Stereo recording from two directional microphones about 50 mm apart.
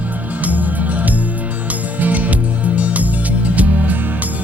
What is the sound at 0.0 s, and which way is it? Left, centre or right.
Music, right.